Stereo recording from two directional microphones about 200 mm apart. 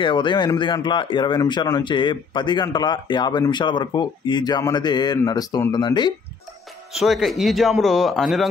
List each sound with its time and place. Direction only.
0.0 s speech: 25° left (ahead or behind)
6.9 s a man's voice: centre (ahead or behind)